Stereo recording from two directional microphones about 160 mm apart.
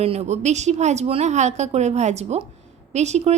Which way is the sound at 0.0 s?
40° right (ahead or behind).